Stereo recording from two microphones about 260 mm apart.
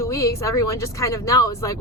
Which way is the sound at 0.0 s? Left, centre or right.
Centre.